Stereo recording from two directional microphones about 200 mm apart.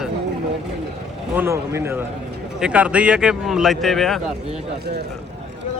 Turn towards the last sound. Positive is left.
turn(degrees=0)  # may be behind; listen again after turning